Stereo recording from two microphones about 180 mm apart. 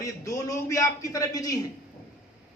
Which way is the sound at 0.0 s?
20° left (ahead or behind).